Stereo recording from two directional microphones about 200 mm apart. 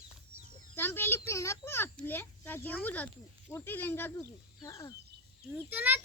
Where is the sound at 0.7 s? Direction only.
10° left (ahead or behind).